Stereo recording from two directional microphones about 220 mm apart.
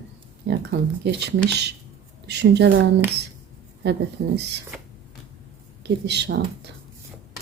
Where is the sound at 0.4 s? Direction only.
50° right (ahead or behind).